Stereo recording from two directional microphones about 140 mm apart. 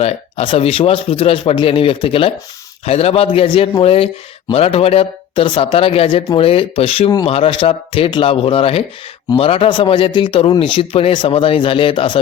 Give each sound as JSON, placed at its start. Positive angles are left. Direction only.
{"t": 0.0, "sound": "speech", "side_deg": 45}